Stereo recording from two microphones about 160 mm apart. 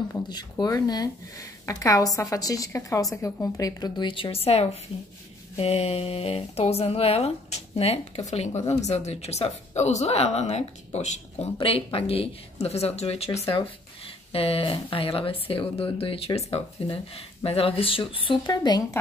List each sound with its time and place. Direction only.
0.3 s a woman's voice: 25° left (ahead or behind)